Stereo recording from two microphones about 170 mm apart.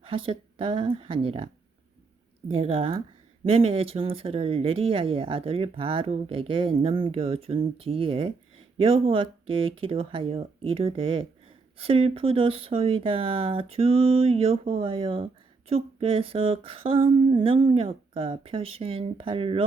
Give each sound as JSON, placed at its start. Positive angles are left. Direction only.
{"t": 0.0, "sound": "speech", "side_deg": -30}
{"t": 2.5, "sound": "speech", "side_deg": -35}